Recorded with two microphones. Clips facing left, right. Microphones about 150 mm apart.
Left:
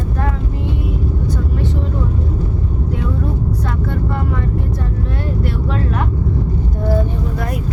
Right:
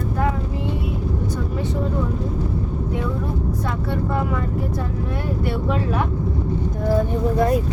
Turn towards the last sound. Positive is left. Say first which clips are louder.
# right 6 dB
turn(degrees=-30)  # may be behind; listen again after turning